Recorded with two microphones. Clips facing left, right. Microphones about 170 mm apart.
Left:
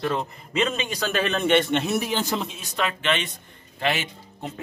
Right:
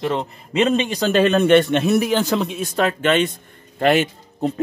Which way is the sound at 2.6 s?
45° right (ahead or behind).